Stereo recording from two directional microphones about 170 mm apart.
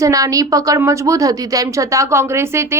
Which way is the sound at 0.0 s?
20° right (ahead or behind).